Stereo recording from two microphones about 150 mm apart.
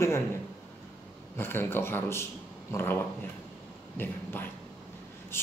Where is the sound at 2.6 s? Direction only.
15° left (ahead or behind).